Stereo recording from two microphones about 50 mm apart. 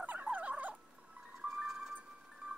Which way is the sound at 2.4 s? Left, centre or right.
Right.